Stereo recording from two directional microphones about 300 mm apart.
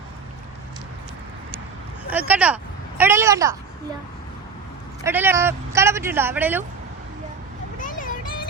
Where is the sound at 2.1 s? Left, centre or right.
Centre.